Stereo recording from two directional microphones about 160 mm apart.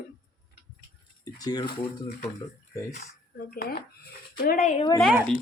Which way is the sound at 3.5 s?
70° left (ahead or behind).